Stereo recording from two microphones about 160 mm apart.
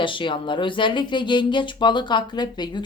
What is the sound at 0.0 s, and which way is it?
Speech, 30° left (ahead or behind).